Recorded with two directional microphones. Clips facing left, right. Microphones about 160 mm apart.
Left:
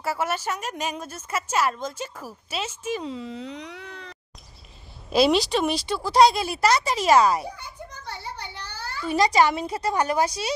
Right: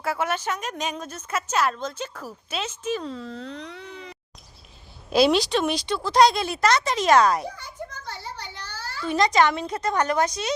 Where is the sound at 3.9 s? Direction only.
5° right (ahead or behind).